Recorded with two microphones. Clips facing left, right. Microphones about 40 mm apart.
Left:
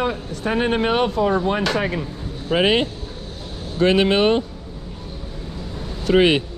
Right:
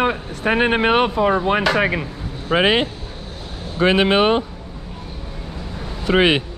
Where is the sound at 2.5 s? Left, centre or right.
Centre.